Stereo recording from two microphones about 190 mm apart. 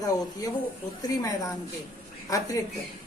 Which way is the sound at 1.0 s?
20° left (ahead or behind).